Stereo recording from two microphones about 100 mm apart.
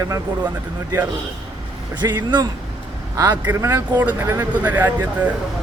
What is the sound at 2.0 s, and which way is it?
Speech, 45° right (ahead or behind).